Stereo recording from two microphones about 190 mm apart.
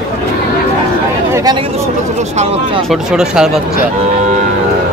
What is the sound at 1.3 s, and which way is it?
Speech, 20° right (ahead or behind).